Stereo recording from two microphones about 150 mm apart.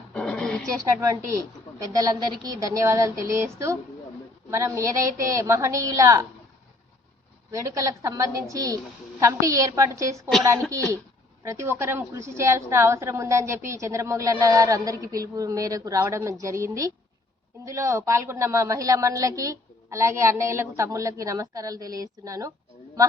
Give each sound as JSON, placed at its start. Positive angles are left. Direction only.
{"t": 0.1, "sound": "a sound", "side_deg": 5}
{"t": 0.9, "sound": "a woman's voice", "side_deg": -20}
{"t": 7.5, "sound": "a woman's voice", "side_deg": -20}